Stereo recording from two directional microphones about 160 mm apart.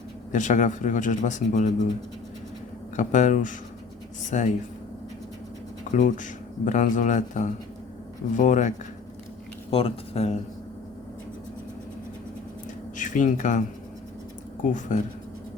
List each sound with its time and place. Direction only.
0.3 s a man's voice: 50° left (ahead or behind)
2.9 s a man's voice: 50° left (ahead or behind)
5.9 s a man's voice: 50° left (ahead or behind)
9.6 s speech: 35° left (ahead or behind)
13.0 s a man's voice: 50° left (ahead or behind)